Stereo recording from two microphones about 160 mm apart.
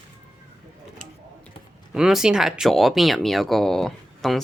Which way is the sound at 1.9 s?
5° right (ahead or behind).